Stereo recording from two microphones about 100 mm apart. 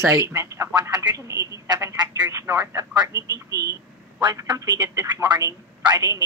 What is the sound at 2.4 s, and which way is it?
A woman's voice, 30° right (ahead or behind).